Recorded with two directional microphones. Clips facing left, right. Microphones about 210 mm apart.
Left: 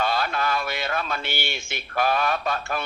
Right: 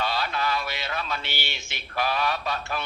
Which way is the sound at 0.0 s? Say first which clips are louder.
Left 3 dB; 50° left (ahead or behind).